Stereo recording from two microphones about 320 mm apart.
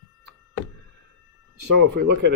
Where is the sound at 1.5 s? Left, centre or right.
Right.